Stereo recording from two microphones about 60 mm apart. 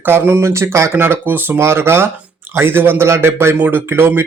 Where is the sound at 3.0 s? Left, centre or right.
Right.